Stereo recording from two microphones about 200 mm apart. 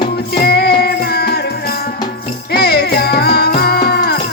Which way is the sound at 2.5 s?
50° left (ahead or behind).